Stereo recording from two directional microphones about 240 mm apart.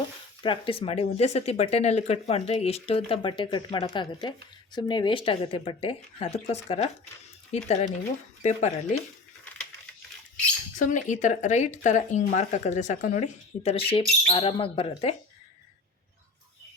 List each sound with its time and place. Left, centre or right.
0.4 s speech: left
10.8 s speech: left